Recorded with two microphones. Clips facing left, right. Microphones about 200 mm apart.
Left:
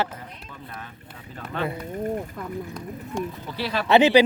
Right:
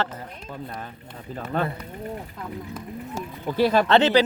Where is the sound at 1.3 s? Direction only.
40° right (ahead or behind).